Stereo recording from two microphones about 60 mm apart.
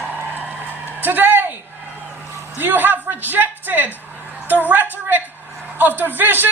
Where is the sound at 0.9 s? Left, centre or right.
Right.